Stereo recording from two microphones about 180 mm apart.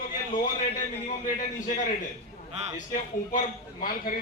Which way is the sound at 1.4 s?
45° left (ahead or behind).